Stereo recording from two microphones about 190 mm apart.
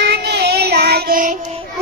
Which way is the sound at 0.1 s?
55° right (ahead or behind).